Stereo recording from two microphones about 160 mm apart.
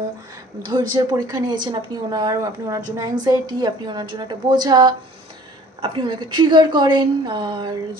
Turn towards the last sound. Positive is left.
turn(degrees=-30)  # may be behind; listen again after turning